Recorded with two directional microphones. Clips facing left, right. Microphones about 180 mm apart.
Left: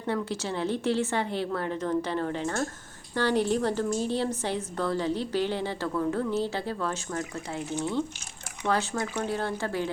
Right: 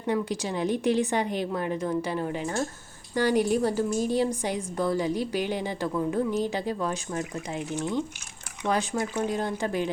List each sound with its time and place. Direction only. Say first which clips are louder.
0.1 s a woman's voice: right 2 dB; 15° right (ahead or behind)